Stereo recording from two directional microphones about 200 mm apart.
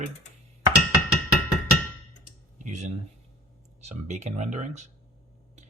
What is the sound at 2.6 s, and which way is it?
Speech, 35° right (ahead or behind).